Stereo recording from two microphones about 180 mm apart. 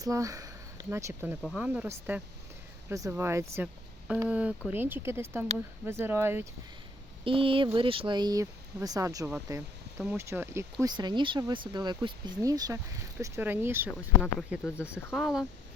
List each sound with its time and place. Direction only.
0.0 s speech: 20° right (ahead or behind)
1.4 s speech: 5° right (ahead or behind)
7.3 s speech: 30° right (ahead or behind); by 13.9 s 10° right (ahead or behind)
14.2 s speech: centre (ahead or behind)